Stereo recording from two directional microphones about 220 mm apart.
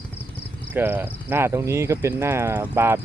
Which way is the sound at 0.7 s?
10° right (ahead or behind).